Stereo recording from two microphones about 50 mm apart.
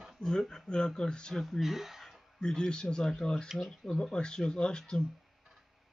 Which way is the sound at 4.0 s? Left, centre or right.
Centre.